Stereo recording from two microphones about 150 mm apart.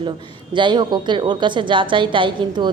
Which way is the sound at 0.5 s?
30° right (ahead or behind).